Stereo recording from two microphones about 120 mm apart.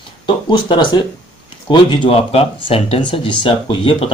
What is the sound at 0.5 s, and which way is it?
Speech, 40° left (ahead or behind).